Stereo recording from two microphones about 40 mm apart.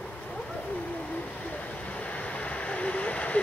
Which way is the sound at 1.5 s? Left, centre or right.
Left.